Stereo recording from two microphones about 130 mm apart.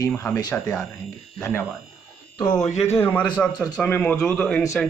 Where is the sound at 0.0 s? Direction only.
20° left (ahead or behind).